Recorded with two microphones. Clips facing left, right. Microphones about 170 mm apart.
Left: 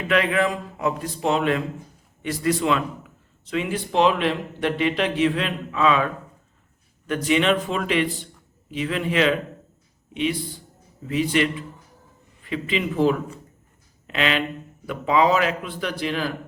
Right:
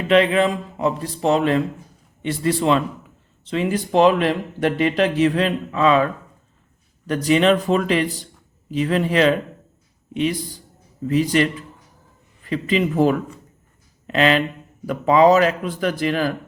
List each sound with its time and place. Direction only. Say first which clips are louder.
0.1 s a man's voice: right 5 dB; 25° right (ahead or behind)
7.1 s speech: right 4 dB; 35° right (ahead or behind)
12.5 s a man's voice: right 5 dB; 40° right (ahead or behind)